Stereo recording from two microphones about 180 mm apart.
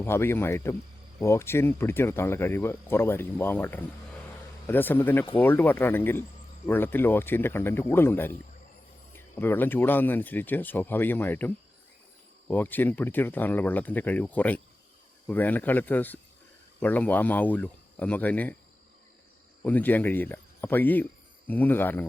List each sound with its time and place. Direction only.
0.0 s speech: 15° left (ahead or behind)
19.6 s speech: 10° left (ahead or behind)